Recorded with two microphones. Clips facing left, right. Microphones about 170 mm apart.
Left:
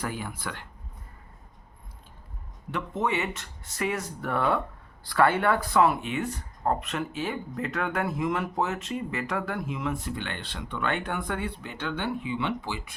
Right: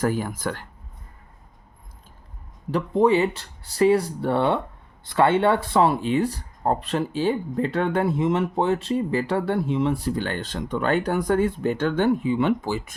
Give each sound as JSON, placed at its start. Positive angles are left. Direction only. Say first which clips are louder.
{"t": 0.0, "sound": "speech", "louder": "right 9 dB", "side_deg": -45}
{"t": 2.7, "sound": "speech", "louder": "right 10 dB", "side_deg": -35}